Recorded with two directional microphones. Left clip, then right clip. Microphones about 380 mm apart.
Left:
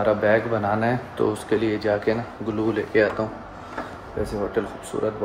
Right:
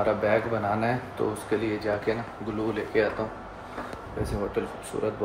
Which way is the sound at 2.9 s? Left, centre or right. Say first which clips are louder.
Left 5 dB; left.